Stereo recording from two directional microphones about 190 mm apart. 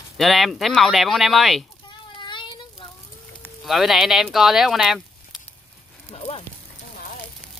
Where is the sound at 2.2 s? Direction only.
25° left (ahead or behind).